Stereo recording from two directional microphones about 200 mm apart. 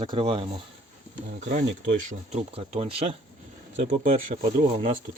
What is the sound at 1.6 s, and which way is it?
Speech, 65° right (ahead or behind).